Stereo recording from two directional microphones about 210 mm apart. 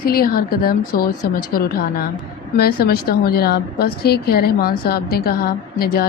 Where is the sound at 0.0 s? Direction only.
45° left (ahead or behind).